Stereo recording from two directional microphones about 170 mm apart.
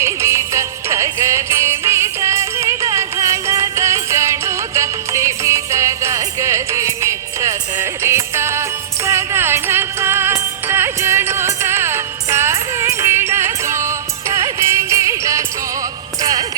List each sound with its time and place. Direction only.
0.0 s music: 15° right (ahead or behind)